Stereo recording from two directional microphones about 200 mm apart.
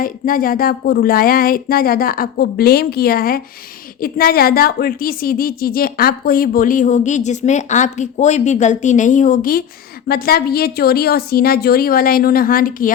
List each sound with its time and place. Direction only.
0.0 s a woman's voice: 45° left (ahead or behind)